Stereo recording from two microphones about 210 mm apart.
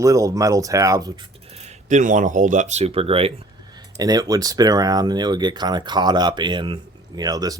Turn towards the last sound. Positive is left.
turn(degrees=-15)  # may be behind; listen again after turning